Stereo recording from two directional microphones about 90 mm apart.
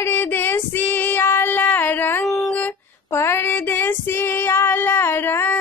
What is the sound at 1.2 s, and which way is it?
Child singing, 25° left (ahead or behind).